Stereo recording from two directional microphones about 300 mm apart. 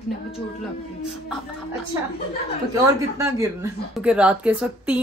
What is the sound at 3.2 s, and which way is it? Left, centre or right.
A woman's voice, centre.